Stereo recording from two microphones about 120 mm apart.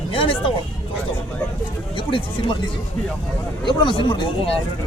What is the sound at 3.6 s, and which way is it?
Speech, 40° left (ahead or behind).